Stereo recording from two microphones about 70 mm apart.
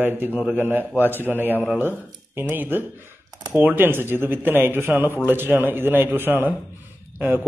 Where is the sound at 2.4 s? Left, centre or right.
Right.